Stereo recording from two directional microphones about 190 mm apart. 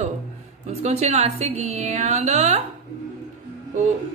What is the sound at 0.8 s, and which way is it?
A woman's voice, 35° right (ahead or behind).